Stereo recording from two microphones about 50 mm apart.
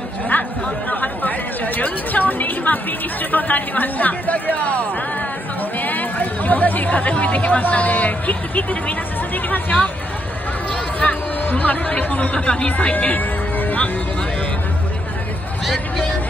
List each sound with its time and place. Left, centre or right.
0.3 s chatter: left
3.3 s speech: left
11.0 s speech: left